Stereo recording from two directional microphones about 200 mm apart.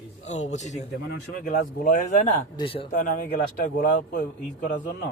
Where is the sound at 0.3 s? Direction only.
35° left (ahead or behind).